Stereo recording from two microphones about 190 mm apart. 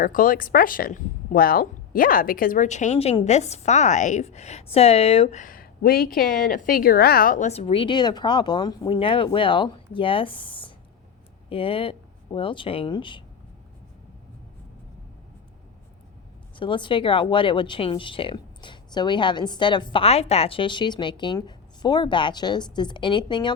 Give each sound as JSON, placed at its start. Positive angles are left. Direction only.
{"t": 0.0, "sound": "speech", "side_deg": 45}
{"t": 16.6, "sound": "speech", "side_deg": 25}